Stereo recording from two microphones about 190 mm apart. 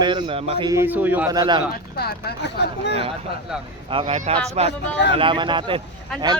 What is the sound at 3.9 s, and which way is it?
Speech, 30° right (ahead or behind).